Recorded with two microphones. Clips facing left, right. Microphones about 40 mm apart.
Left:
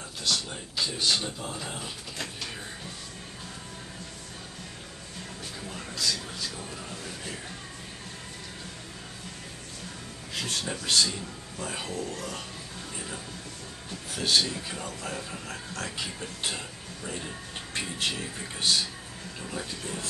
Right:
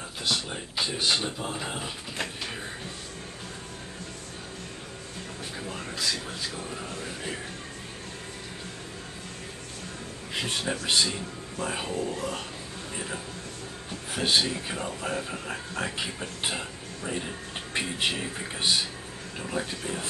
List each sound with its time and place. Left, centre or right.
0.2 s speech: centre
5.6 s speech: centre
10.3 s speech: centre